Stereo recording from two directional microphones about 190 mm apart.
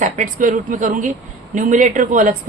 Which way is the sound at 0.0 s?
45° right (ahead or behind).